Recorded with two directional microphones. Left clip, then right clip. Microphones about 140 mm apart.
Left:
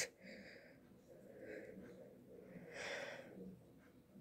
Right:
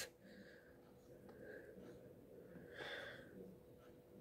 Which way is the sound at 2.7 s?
20° left (ahead or behind).